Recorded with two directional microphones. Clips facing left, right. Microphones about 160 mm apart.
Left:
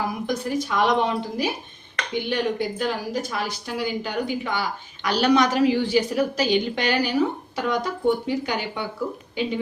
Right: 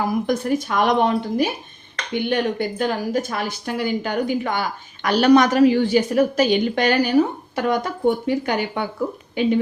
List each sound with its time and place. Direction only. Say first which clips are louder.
0.0 s speech: right 5 dB; 50° right (ahead or behind)